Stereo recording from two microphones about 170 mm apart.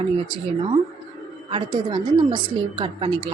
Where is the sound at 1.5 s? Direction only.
30° right (ahead or behind).